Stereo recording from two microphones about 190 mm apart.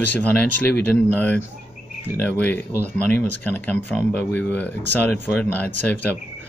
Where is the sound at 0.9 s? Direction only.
10° left (ahead or behind).